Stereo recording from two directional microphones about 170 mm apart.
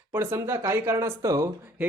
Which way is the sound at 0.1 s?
15° right (ahead or behind).